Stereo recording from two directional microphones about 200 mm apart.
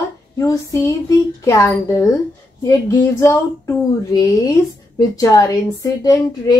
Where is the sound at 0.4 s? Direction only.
15° left (ahead or behind).